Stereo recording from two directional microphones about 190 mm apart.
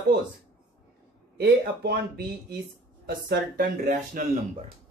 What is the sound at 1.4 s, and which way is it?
Speech, 60° right (ahead or behind).